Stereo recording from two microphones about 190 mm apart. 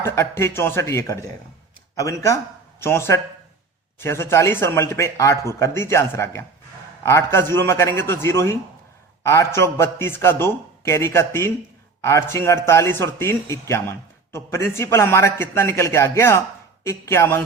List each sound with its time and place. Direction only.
0.0 s a man's voice: 15° left (ahead or behind)